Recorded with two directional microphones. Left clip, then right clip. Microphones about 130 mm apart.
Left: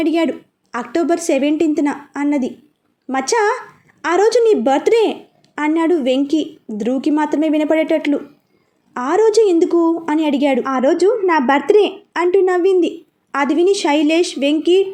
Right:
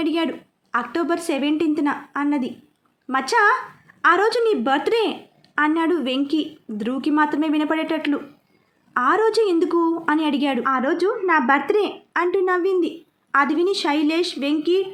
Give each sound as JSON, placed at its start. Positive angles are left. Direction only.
{"t": 0.0, "sound": "a woman's voice", "side_deg": 25}